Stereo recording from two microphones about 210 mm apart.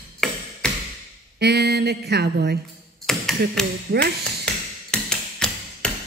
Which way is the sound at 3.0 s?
Centre (ahead or behind).